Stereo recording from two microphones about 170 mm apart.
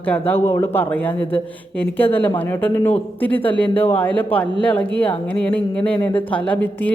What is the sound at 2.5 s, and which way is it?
Speech, 10° left (ahead or behind).